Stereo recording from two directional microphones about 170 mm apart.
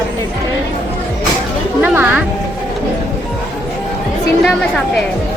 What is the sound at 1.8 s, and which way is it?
Music, 10° right (ahead or behind).